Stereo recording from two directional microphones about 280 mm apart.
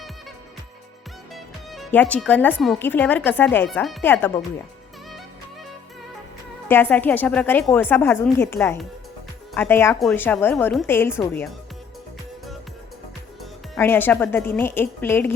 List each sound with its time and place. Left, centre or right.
1.3 s speech: centre
6.7 s speech: centre
13.4 s a woman's voice: centre